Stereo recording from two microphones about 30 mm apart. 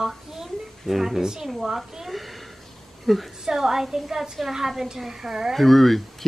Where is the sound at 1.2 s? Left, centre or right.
Right.